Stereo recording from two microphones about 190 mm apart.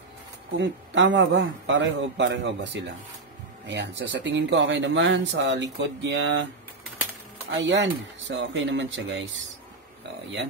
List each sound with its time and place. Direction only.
0.6 s speech: 70° right (ahead or behind)
7.6 s speech: 70° right (ahead or behind)